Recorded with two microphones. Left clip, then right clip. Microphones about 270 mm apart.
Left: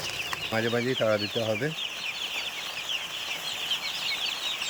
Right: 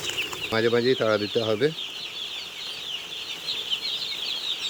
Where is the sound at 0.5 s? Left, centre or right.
Centre.